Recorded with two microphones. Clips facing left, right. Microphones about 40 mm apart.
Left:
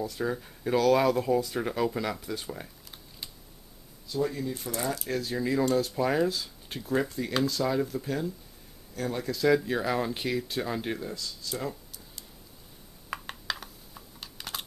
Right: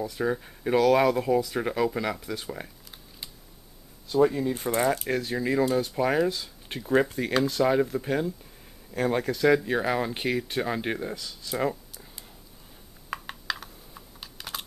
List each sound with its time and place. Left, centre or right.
0.2 s speech: centre
4.1 s speech: right
5.0 s speech: right
5.4 s speech: centre
6.7 s speech: right
8.9 s speech: right
9.2 s speech: right
9.6 s speech: centre
13.1 s computer keyboard: centre